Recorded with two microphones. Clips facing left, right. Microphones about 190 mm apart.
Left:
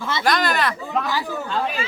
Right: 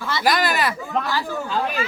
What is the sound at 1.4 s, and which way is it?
Speech, centre (ahead or behind).